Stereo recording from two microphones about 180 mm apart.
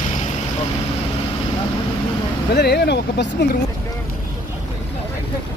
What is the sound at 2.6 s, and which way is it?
Speech, 65° left (ahead or behind).